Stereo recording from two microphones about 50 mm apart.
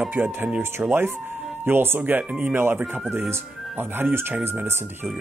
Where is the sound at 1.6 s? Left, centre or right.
Right.